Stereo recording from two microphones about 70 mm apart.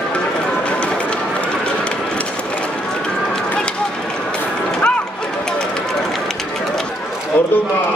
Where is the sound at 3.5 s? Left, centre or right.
Centre.